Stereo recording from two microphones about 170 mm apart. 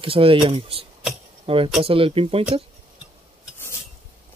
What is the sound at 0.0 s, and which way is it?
Speech, 30° right (ahead or behind).